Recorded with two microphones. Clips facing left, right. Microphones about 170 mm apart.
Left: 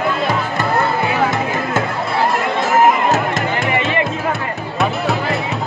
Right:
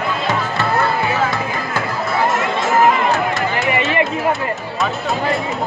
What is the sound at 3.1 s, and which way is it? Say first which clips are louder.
Music: left 1 dB; 45° left (ahead or behind).